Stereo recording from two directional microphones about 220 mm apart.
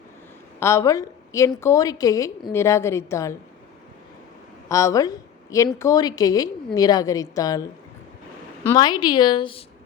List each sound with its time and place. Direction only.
0.6 s a woman's voice: 15° left (ahead or behind)
4.7 s a woman's voice: 15° left (ahead or behind)
8.6 s a woman's voice: 20° left (ahead or behind)